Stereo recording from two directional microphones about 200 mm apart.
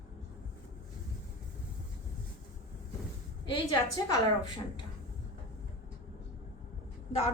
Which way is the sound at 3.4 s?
20° left (ahead or behind).